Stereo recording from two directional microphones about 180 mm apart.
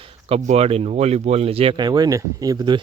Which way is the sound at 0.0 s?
35° right (ahead or behind).